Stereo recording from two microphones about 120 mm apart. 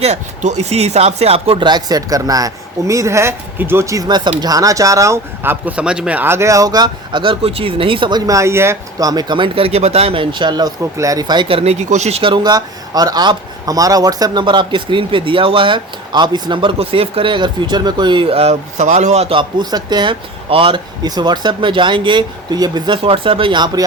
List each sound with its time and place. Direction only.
0.0 s speech: 70° right (ahead or behind)
1.6 s speech: 35° right (ahead or behind)
8.3 s speech: 25° right (ahead or behind); by 12.2 s 70° right (ahead or behind)
12.2 s speech: 40° right (ahead or behind); by 19.4 s 60° right (ahead or behind)
19.4 s speech: 35° right (ahead or behind)
23.0 s speech: 50° right (ahead or behind)